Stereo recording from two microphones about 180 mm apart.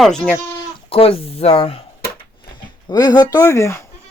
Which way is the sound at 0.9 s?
30° left (ahead or behind).